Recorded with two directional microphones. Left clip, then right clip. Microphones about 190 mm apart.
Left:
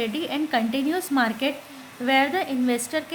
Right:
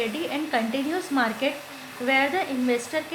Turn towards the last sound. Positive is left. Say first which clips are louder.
# even
turn(degrees=40)  # may be behind; listen again after turning